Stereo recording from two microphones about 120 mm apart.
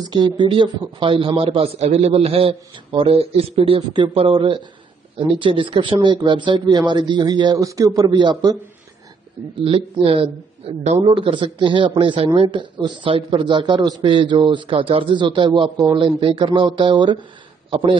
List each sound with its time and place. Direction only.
0.1 s a man's voice: 40° right (ahead or behind)
9.7 s a man's voice: 50° right (ahead or behind)